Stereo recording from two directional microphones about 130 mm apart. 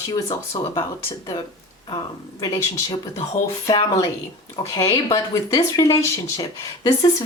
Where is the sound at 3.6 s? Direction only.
35° left (ahead or behind).